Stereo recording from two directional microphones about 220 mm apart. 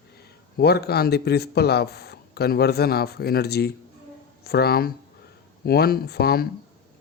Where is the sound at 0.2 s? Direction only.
45° left (ahead or behind).